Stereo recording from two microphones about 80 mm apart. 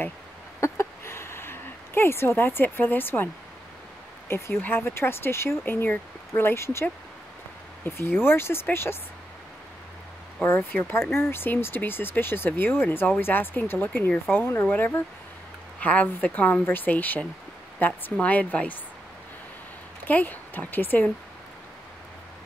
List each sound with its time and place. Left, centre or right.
0.6 s a sound: left
4.3 s speech: left
10.4 s speech: left
20.1 s speech: left